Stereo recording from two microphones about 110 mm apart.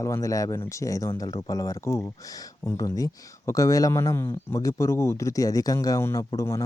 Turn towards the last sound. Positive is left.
turn(degrees=25)  # may be behind; listen again after turning